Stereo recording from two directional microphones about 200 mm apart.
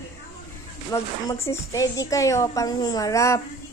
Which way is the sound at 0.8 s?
15° left (ahead or behind).